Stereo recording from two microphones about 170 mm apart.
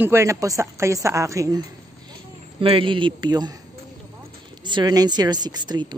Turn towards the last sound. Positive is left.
turn(degrees=-25)  # may be behind; listen again after turning